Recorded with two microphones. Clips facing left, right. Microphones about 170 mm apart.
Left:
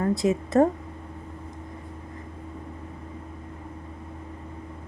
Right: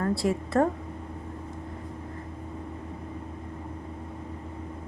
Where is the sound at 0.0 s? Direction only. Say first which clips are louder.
Left 3 dB; 20° left (ahead or behind).